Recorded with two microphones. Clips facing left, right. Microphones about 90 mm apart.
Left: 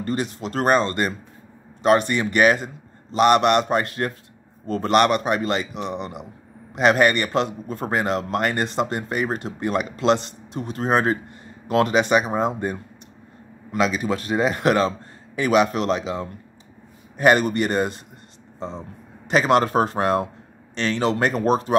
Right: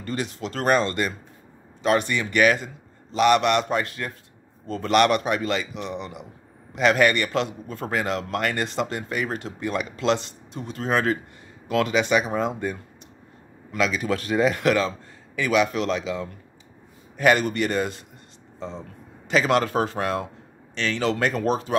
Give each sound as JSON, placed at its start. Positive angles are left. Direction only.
{"t": 0.0, "sound": "a man's voice", "side_deg": 40}
{"t": 10.2, "sound": "speech", "side_deg": 55}
{"t": 10.8, "sound": "speech", "side_deg": 30}
{"t": 11.7, "sound": "speech", "side_deg": 40}
{"t": 14.0, "sound": "a man's voice", "side_deg": 25}
{"t": 17.2, "sound": "speech", "side_deg": 40}
{"t": 18.6, "sound": "speech", "side_deg": 20}
{"t": 19.4, "sound": "speech", "side_deg": 40}
{"t": 20.7, "sound": "a man's voice", "side_deg": 25}